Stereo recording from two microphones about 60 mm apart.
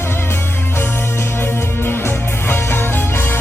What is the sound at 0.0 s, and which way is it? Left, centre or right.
Music, left.